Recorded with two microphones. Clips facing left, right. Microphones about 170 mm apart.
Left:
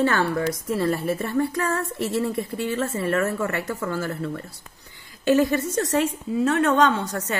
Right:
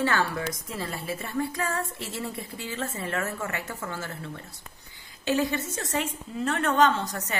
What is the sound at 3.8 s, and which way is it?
A woman's voice, 45° left (ahead or behind).